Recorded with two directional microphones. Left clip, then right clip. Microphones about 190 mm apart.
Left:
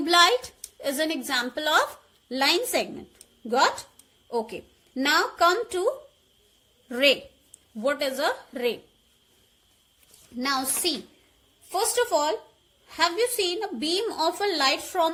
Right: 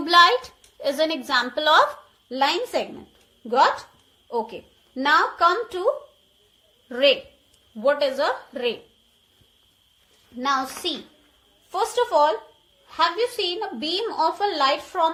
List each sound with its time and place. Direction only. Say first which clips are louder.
0.0 s a woman's voice: right 4 dB; 40° left (ahead or behind)
2.3 s a woman's voice: right 1 dB; 50° left (ahead or behind)
4.5 s a woman's voice: even; 55° left (ahead or behind)
10.4 s a woman's voice: right 3 dB; 55° left (ahead or behind)